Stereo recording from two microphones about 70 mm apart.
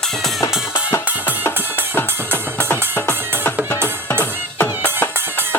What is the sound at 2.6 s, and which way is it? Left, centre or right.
Music, left.